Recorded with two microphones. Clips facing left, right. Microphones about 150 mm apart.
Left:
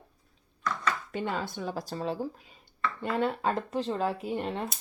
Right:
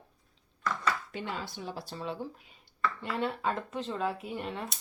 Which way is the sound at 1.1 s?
50° left (ahead or behind).